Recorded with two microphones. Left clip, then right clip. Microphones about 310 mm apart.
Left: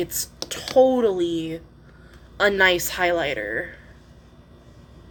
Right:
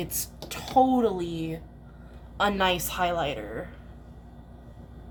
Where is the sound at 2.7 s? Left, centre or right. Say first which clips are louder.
Left 5 dB; right.